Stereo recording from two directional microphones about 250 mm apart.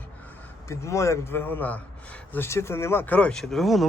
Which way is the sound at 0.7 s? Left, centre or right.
Centre.